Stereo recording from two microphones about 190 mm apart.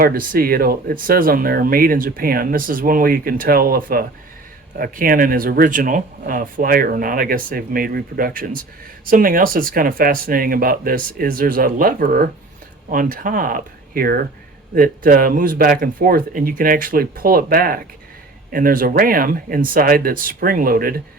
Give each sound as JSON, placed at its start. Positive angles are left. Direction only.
{"t": 0.0, "sound": "speech", "side_deg": -50}